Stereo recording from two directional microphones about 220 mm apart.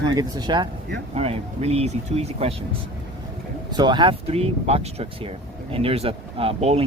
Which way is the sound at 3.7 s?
20° right (ahead or behind).